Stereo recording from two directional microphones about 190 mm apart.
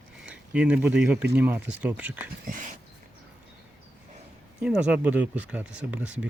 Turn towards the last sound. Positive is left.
turn(degrees=-5)  # may be behind; listen again after turning